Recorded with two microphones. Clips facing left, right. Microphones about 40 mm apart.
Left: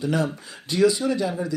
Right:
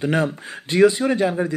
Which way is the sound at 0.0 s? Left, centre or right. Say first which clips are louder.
Right 3 dB; right.